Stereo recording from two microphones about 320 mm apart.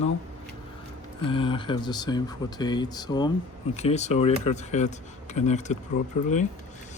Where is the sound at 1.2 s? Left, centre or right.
Centre.